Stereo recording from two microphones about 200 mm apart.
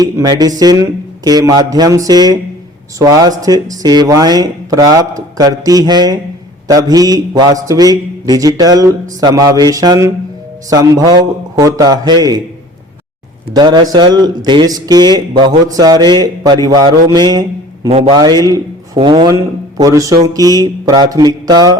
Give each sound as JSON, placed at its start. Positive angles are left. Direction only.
{"t": 0.0, "sound": "a man's voice", "side_deg": -20}
{"t": 13.5, "sound": "a man's voice", "side_deg": -20}